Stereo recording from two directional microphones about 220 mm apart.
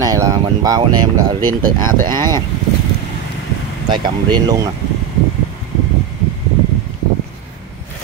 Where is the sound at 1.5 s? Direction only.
40° right (ahead or behind).